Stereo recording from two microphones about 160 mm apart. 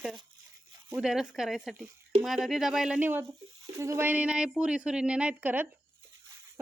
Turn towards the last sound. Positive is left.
turn(degrees=-10)  # may be behind; listen again after turning